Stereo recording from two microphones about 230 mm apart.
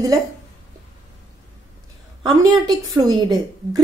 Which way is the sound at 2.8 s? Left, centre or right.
Centre.